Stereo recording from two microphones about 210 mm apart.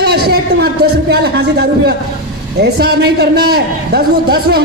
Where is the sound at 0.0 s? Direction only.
50° right (ahead or behind).